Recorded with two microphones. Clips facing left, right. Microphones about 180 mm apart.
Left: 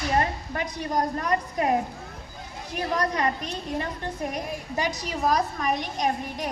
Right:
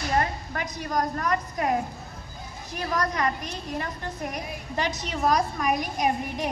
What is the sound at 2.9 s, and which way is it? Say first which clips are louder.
Speech: left 1 dB; 30° left (ahead or behind).